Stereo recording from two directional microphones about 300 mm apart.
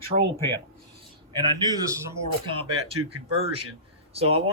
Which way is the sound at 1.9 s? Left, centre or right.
Centre.